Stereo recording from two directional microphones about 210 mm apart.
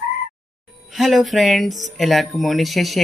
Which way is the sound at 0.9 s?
Centre (ahead or behind).